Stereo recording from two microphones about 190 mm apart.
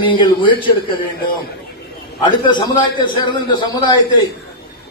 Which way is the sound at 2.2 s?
25° left (ahead or behind).